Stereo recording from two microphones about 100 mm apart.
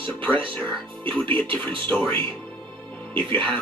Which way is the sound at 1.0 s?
55° right (ahead or behind).